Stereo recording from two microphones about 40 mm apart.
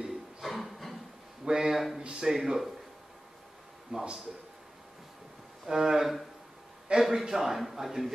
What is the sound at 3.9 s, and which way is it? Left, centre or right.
Speech, right.